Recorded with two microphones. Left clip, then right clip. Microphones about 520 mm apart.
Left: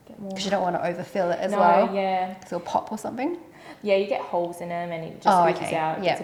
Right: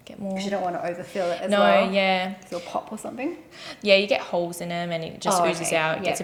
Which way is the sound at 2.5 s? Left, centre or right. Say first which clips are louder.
Left 4 dB; left.